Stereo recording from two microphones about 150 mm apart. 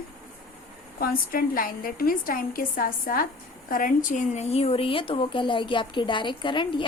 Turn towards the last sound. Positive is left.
turn(degrees=35)  # may be behind; listen again after turning